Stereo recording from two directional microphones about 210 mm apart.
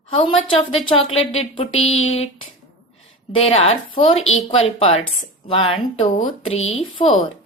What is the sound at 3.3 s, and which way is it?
Speech, 25° left (ahead or behind).